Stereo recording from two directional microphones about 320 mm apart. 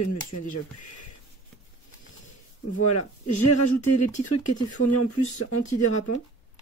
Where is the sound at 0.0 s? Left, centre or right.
Left.